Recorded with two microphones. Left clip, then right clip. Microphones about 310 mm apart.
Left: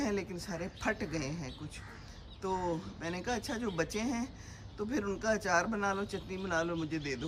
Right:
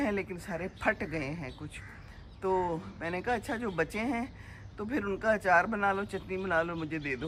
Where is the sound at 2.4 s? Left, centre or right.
Centre.